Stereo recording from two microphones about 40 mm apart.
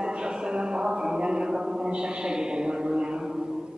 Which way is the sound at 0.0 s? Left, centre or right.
Right.